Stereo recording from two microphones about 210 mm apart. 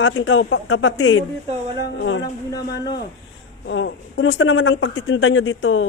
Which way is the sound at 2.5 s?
20° left (ahead or behind).